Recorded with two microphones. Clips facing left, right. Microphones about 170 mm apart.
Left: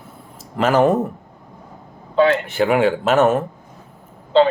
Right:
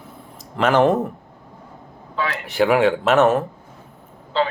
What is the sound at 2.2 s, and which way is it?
Speech, 25° left (ahead or behind).